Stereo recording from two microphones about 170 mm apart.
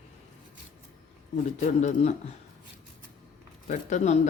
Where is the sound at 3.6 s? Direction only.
45° left (ahead or behind).